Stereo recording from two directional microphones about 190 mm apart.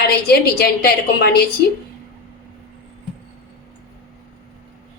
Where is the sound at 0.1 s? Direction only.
55° left (ahead or behind).